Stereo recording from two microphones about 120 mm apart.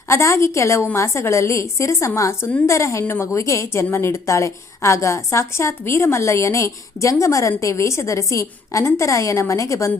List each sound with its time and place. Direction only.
0.1 s a woman's voice: 25° left (ahead or behind)